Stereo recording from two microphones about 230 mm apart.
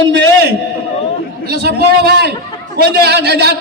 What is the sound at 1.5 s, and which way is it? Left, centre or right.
A man's voice, right.